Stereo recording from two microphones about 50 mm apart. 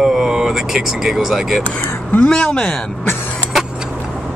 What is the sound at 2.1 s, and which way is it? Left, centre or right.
Speech, centre.